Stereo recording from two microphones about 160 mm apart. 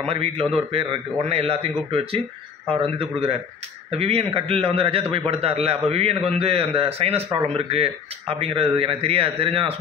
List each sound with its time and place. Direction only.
0.0 s a man's voice: 40° right (ahead or behind)